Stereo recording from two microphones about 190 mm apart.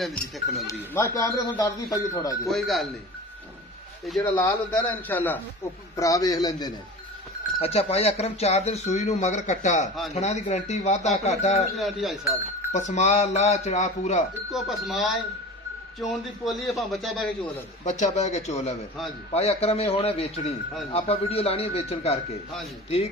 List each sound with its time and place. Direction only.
0.0 s a man's voice: centre (ahead or behind)
0.7 s speech: 15° left (ahead or behind)
2.4 s a man's voice: centre (ahead or behind)
4.2 s a man's voice: 10° left (ahead or behind)
7.5 s speech: 30° left (ahead or behind)
11.7 s a man's voice: centre (ahead or behind)
12.7 s speech: 40° left (ahead or behind)
14.5 s a man's voice: centre (ahead or behind)
17.8 s speech: 40° left (ahead or behind)